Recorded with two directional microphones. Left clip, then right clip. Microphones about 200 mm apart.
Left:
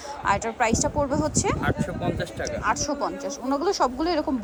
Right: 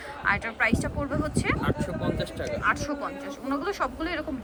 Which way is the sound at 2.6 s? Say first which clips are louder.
Left 2 dB; 20° left (ahead or behind).